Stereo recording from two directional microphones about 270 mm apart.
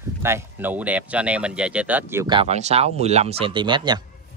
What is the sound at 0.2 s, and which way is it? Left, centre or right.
Speech, centre.